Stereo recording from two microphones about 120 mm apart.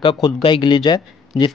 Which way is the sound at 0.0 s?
45° left (ahead or behind).